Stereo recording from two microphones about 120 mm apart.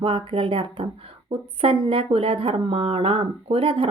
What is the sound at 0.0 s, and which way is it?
A woman's voice, 45° right (ahead or behind).